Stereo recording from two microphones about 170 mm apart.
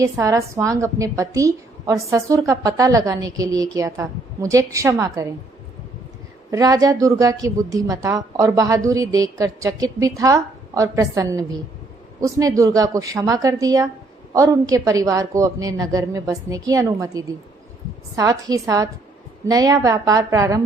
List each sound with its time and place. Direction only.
0.0 s a woman's voice: 20° right (ahead or behind)
6.5 s a woman's voice: 20° right (ahead or behind)